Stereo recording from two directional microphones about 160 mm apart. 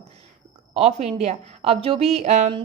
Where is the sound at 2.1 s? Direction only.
45° right (ahead or behind).